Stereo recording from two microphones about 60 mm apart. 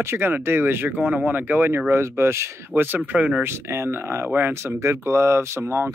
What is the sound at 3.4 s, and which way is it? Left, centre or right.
Speech, right.